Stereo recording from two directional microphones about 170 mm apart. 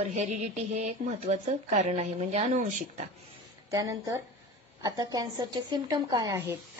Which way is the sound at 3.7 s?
20° right (ahead or behind).